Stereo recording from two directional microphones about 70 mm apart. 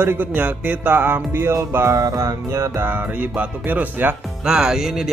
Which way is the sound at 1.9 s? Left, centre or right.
Right.